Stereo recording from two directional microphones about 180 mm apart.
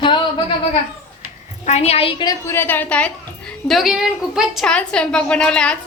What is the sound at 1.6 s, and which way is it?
A woman's voice, 35° left (ahead or behind).